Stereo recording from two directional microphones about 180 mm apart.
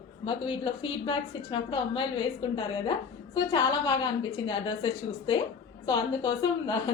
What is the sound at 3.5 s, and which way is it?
A woman's voice, 25° left (ahead or behind).